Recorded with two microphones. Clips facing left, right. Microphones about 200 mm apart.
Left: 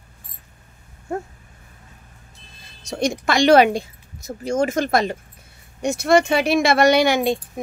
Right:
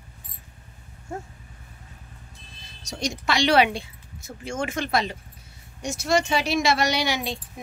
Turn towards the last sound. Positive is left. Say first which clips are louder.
# left 10 dB
turn(degrees=50)  # may be behind; listen again after turning